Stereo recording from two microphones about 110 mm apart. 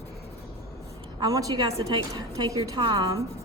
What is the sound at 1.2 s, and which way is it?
A woman's voice, 40° right (ahead or behind).